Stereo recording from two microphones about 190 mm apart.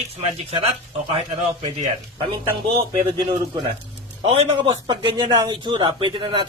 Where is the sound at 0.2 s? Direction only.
30° right (ahead or behind).